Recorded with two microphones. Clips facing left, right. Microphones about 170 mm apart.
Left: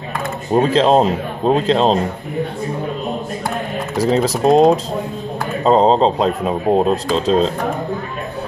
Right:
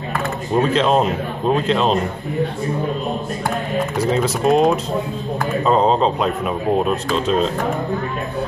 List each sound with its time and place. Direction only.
0.6 s speech: 35° left (ahead or behind)
4.1 s speech: 35° left (ahead or behind)